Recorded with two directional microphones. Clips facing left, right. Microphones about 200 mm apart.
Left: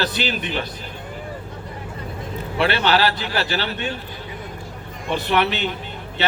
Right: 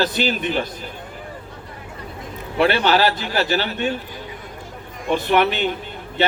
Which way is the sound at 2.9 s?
45° right (ahead or behind).